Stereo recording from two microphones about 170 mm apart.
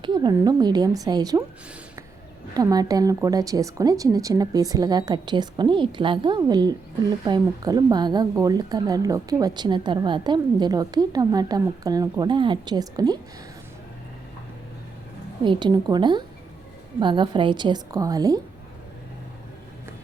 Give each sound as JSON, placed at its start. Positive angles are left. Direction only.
{"t": 0.0, "sound": "a woman's voice", "side_deg": -25}
{"t": 2.6, "sound": "a woman's voice", "side_deg": -20}
{"t": 15.4, "sound": "a woman's voice", "side_deg": -25}